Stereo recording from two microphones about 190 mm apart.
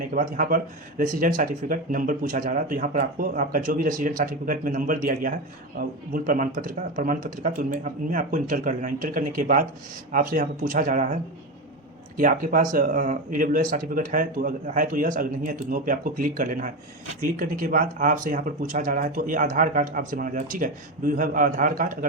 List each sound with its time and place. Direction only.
0.1 s speech: 45° right (ahead or behind)